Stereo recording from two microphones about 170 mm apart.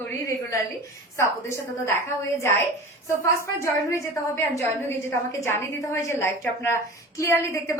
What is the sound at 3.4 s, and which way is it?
A woman's voice, 15° left (ahead or behind).